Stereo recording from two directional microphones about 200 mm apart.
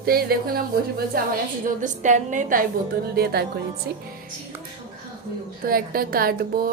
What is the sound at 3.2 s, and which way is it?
Speech, 50° right (ahead or behind).